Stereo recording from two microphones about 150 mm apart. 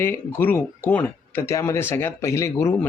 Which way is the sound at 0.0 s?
15° left (ahead or behind).